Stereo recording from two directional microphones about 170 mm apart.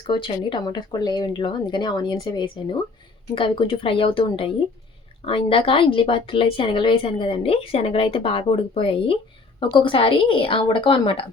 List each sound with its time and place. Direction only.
0.1 s speech: 25° left (ahead or behind)